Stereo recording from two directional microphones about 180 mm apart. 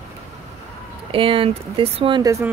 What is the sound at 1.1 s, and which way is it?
Speech, 30° right (ahead or behind).